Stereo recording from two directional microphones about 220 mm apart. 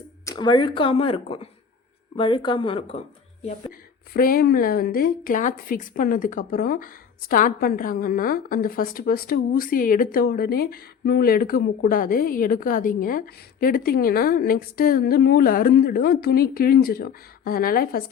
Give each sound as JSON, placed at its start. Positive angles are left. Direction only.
{"t": 0.3, "sound": "speech", "side_deg": 20}
{"t": 3.4, "sound": "speech", "side_deg": 40}